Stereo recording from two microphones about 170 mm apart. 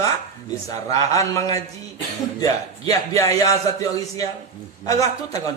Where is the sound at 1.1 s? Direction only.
20° left (ahead or behind).